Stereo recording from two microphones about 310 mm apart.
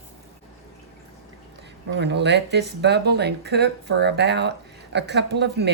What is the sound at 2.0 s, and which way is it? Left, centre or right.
Speech, right.